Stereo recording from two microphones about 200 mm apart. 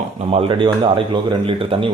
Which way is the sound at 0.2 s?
30° right (ahead or behind).